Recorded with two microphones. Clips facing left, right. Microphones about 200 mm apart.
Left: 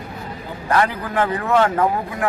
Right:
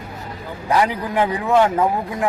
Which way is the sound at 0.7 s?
15° right (ahead or behind).